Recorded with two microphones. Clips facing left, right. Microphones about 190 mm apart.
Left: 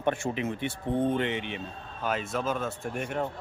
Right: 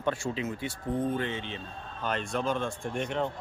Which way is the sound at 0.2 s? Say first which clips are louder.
Left 2 dB; 20° left (ahead or behind).